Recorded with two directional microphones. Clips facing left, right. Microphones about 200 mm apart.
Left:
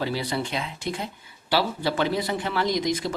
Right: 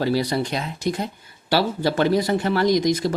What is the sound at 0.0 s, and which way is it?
Speech, 40° right (ahead or behind).